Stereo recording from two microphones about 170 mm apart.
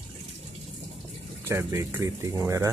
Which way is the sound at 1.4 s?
15° right (ahead or behind).